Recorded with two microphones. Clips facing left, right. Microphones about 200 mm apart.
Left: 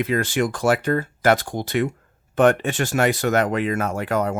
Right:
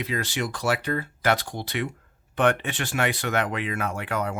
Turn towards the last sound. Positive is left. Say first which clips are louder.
# left 6 dB
turn(degrees=40)  # may be behind; listen again after turning